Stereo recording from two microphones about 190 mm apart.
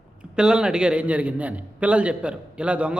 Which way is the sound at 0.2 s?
5° right (ahead or behind).